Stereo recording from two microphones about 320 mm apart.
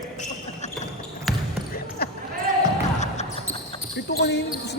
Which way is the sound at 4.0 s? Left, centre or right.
Left.